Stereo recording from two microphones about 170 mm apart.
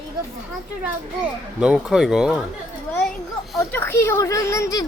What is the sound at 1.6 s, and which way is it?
Speech, 5° right (ahead or behind).